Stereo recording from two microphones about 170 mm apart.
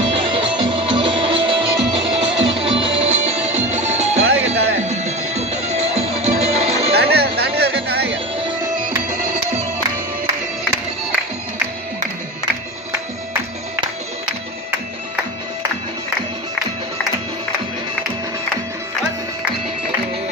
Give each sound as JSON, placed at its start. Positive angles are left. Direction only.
{"t": 0.0, "sound": "music", "side_deg": -30}
{"t": 7.0, "sound": "music", "side_deg": -70}
{"t": 9.1, "sound": "music", "side_deg": -40}